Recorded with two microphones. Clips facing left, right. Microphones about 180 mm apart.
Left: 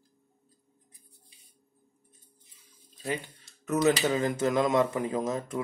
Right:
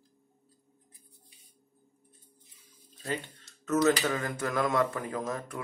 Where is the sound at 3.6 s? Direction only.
15° left (ahead or behind).